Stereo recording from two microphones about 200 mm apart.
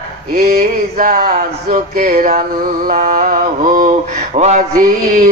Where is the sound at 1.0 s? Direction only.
45° right (ahead or behind).